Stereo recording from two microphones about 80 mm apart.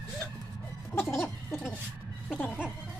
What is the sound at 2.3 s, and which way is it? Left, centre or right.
Music, left.